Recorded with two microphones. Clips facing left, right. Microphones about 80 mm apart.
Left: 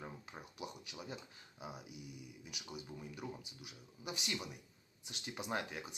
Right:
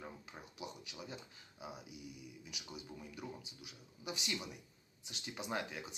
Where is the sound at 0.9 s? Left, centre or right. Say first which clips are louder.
Left 1 dB; centre.